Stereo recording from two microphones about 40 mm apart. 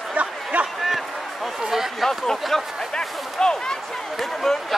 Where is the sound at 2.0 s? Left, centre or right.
Centre.